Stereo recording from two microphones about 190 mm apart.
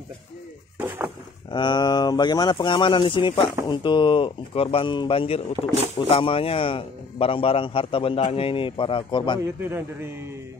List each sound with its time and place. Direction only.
0.7 s a sound: 10° right (ahead or behind)
1.5 s speech: 25° left (ahead or behind)
9.6 s a man's voice: 10° right (ahead or behind)